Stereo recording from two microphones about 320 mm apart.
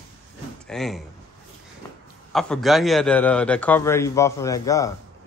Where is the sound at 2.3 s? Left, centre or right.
Centre.